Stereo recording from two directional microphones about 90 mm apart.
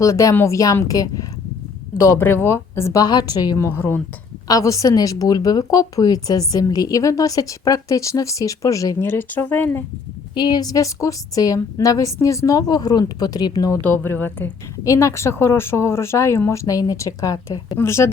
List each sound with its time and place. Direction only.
0.0 s speech: 40° left (ahead or behind)
2.1 s a woman's voice: 25° left (ahead or behind)
3.0 s a woman's voice: 45° left (ahead or behind)
3.6 s a woman's voice: 25° left (ahead or behind)
4.4 s speech: 40° left (ahead or behind)
9.0 s a woman's voice: 20° left (ahead or behind)
10.3 s a woman's voice: 50° left (ahead or behind)
13.8 s a woman's voice: 25° left (ahead or behind)
14.8 s a woman's voice: 35° left (ahead or behind)
17.7 s speech: 30° left (ahead or behind)